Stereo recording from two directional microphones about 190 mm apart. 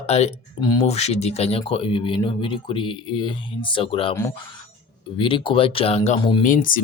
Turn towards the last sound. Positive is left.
turn(degrees=45)  # may be behind; listen again after turning